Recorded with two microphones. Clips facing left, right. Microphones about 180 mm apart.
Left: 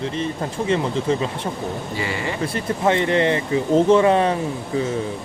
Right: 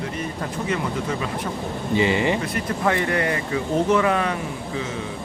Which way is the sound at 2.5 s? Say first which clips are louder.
Left 3 dB; 25° left (ahead or behind).